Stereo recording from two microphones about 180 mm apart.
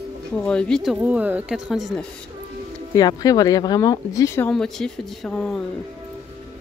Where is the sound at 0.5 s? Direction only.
5° left (ahead or behind).